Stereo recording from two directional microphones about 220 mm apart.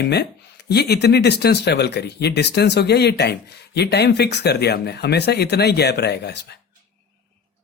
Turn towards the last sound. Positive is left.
turn(degrees=50)  # may be behind; listen again after turning